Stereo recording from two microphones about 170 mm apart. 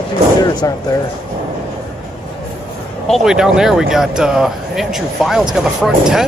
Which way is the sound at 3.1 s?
5° right (ahead or behind).